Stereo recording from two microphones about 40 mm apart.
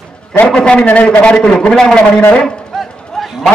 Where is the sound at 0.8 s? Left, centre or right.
Left.